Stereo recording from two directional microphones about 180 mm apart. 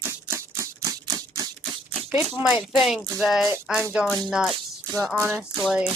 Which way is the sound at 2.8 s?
Centre (ahead or behind).